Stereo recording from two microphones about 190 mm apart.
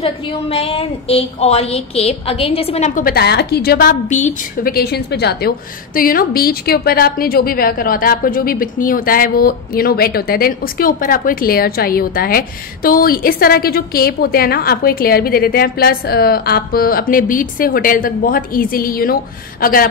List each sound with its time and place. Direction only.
0.0 s a woman's voice: 30° left (ahead or behind); by 3.9 s 55° left (ahead or behind)
4.1 s a woman's voice: 40° left (ahead or behind)